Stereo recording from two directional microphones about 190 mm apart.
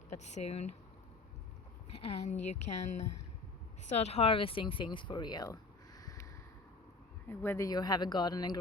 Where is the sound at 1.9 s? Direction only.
35° left (ahead or behind).